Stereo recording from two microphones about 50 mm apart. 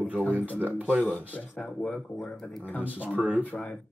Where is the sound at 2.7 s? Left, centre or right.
Left.